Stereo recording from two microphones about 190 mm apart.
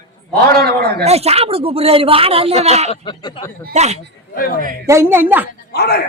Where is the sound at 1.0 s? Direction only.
35° right (ahead or behind).